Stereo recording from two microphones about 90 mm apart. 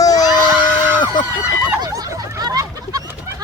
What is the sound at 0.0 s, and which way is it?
Screaming, 45° left (ahead or behind).